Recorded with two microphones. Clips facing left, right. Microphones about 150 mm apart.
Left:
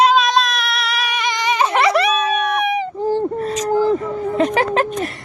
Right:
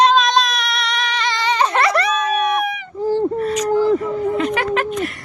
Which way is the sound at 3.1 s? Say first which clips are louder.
Right 3 dB; 40° left (ahead or behind).